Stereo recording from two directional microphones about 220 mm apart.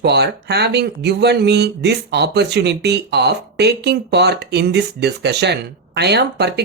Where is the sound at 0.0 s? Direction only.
50° right (ahead or behind).